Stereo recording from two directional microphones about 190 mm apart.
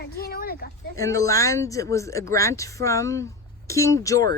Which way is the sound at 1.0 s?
15° left (ahead or behind).